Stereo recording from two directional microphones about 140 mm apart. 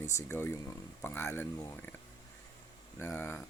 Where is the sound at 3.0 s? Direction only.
15° left (ahead or behind).